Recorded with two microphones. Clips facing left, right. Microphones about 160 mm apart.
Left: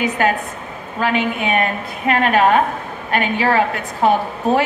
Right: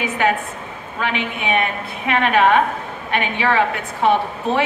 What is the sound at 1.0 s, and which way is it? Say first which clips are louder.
A woman's voice: left 4 dB; 40° left (ahead or behind).